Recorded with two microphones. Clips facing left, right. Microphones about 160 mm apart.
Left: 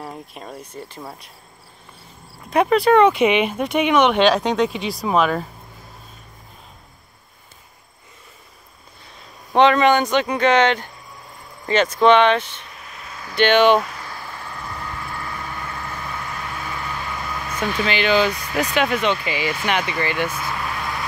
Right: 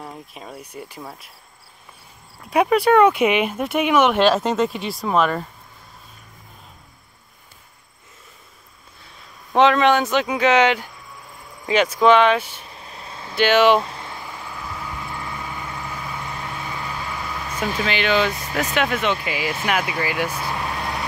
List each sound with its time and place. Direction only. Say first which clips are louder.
0.0 s speech: left 2 dB; centre (ahead or behind)
2.5 s speech: left 1 dB; 10° right (ahead or behind)
9.5 s speech: left 1 dB; centre (ahead or behind)
12.6 s vehicle: right 1 dB; 30° right (ahead or behind)
13.4 s speech: left 1 dB; 5° right (ahead or behind)
13.7 s a sound: left 1 dB; 25° right (ahead or behind); by 15.0 s 5° right (ahead or behind)
15.0 s vehicle: even; 15° right (ahead or behind)
17.7 s speech: left 2 dB; centre (ahead or behind)
20.3 s vehicle: right 1 dB; 35° right (ahead or behind)